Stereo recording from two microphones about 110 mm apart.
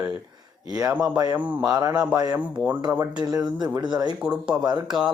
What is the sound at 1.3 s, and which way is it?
Speech, 15° right (ahead or behind).